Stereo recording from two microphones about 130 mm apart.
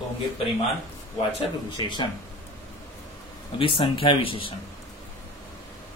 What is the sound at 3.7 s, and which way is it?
Speech, 40° left (ahead or behind).